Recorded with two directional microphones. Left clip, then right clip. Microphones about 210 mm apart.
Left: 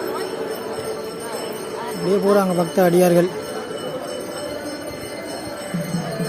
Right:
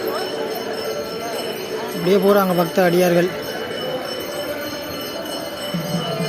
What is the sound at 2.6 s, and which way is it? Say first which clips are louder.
Speech: even; 15° left (ahead or behind).